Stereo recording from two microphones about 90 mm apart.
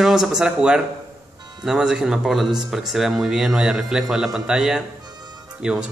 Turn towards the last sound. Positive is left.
turn(degrees=-10)  # may be behind; listen again after turning